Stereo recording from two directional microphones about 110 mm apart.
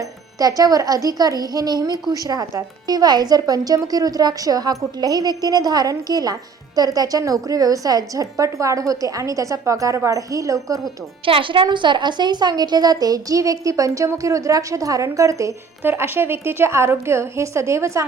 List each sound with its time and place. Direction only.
0.0 s a woman's voice: 35° right (ahead or behind)
11.3 s a woman's voice: 55° right (ahead or behind); by 18.0 s 25° right (ahead or behind)